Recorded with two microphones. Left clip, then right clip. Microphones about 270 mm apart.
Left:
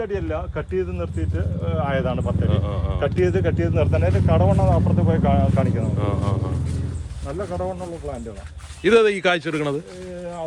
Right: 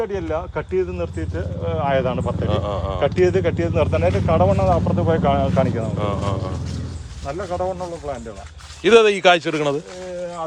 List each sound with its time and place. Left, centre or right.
0.0 s speech: right
2.5 s speech: centre
3.0 s speech: right
6.0 s speech: centre
8.8 s speech: centre